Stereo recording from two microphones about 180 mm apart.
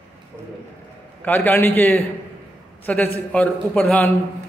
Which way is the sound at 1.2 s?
10° left (ahead or behind).